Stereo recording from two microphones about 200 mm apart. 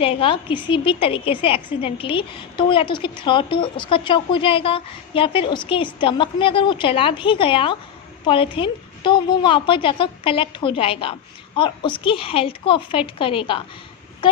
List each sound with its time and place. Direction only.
0.0 s a woman's voice: 25° left (ahead or behind)